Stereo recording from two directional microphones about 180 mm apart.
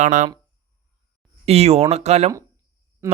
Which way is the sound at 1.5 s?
35° right (ahead or behind).